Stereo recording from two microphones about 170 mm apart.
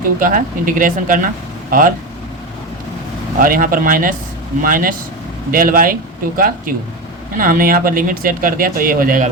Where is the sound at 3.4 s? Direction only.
55° right (ahead or behind).